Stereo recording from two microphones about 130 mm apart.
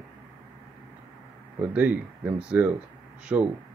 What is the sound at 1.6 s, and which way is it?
Speech, 10° right (ahead or behind).